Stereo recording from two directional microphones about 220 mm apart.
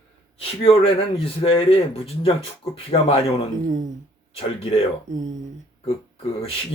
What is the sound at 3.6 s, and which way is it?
Speech, 35° right (ahead or behind).